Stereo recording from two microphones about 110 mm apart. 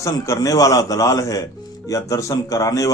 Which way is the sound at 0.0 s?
30° left (ahead or behind).